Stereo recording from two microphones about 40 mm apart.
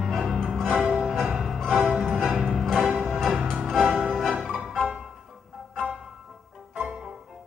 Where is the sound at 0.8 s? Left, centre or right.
Centre.